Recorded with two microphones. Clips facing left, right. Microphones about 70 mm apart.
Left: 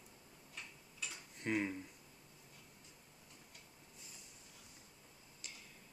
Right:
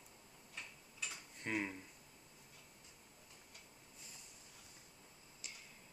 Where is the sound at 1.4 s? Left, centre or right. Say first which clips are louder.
Left 3 dB; centre.